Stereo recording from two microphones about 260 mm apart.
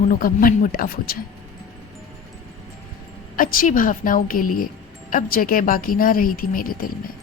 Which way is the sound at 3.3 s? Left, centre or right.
Left.